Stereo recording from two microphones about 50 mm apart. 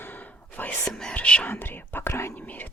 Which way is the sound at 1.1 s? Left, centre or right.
Left.